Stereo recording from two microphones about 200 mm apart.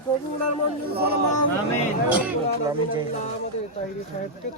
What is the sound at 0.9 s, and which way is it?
Speech, 50° right (ahead or behind).